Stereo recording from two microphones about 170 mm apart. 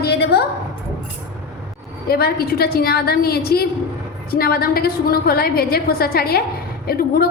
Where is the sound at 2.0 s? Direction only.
65° left (ahead or behind).